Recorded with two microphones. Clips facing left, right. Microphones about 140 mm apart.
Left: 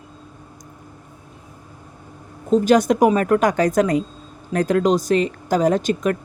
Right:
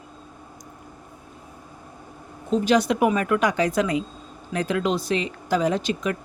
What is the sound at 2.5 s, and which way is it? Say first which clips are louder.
A woman's voice: left 5 dB; 45° left (ahead or behind).